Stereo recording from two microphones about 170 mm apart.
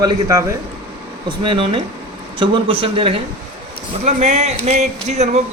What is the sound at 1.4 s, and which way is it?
A man's voice, 30° right (ahead or behind).